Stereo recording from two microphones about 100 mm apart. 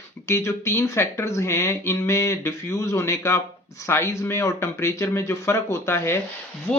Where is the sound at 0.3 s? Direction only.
25° left (ahead or behind).